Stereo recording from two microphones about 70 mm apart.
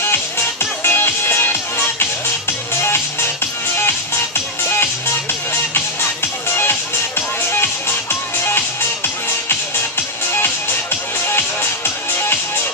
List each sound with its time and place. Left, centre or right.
0.0 s music: left
6.5 s music: left
12.1 s music: left